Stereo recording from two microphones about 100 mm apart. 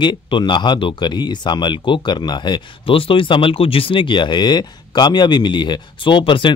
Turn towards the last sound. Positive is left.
turn(degrees=55)  # may be behind; listen again after turning